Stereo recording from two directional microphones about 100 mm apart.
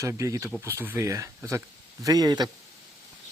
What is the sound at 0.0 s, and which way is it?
Speech, 30° right (ahead or behind).